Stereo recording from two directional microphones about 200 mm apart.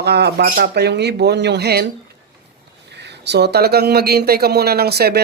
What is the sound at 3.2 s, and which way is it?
Speech, 55° right (ahead or behind).